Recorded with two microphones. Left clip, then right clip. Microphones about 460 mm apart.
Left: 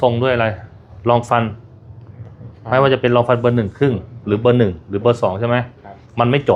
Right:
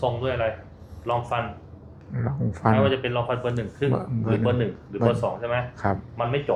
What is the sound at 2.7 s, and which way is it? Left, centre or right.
Speech, left.